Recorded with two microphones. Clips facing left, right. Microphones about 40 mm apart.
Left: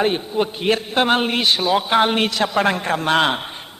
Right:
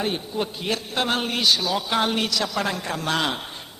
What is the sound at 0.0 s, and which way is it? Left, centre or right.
A man's voice, left.